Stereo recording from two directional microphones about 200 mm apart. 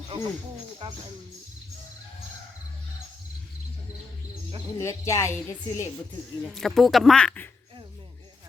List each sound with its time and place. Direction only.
0.1 s speech: 30° right (ahead or behind)
4.8 s a woman's voice: 15° left (ahead or behind)
6.5 s speech: centre (ahead or behind)